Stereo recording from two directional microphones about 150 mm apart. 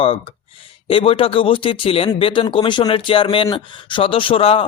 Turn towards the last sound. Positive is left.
turn(degrees=40)  # may be behind; listen again after turning